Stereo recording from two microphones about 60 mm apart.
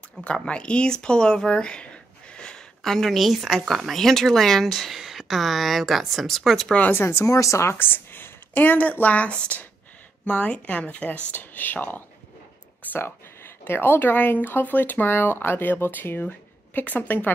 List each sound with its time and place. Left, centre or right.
0.2 s speech: centre
6.9 s speech: left
7.2 s speech: left
7.7 s speech: left
11.1 s speech: left